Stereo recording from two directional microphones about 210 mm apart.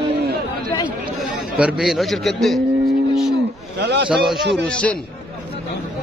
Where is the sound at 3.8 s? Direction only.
55° right (ahead or behind).